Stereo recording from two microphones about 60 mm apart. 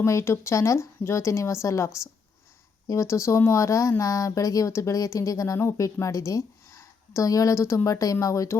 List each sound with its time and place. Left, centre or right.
0.0 s a woman's voice: left
3.0 s a woman's voice: left
7.9 s speech: left